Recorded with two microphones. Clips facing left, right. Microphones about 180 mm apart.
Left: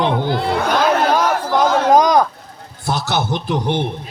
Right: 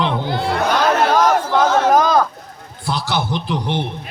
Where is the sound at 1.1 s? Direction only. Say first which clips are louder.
Right 1 dB; 15° left (ahead or behind).